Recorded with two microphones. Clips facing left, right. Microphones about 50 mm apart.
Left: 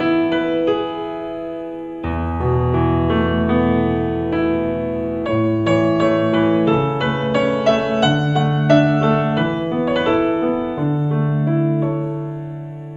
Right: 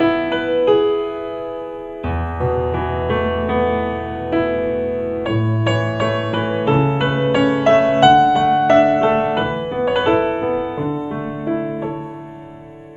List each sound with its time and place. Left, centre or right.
0.0 s music: centre
2.4 s music: centre
5.3 s music: centre
5.6 s music: right
10.6 s music: centre